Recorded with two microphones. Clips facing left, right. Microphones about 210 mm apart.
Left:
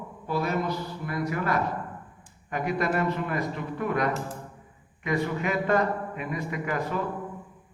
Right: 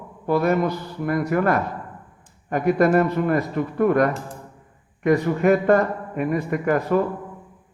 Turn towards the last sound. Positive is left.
turn(degrees=-50)  # may be behind; listen again after turning